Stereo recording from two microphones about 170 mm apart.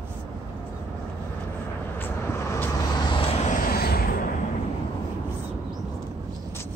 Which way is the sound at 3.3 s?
45° left (ahead or behind).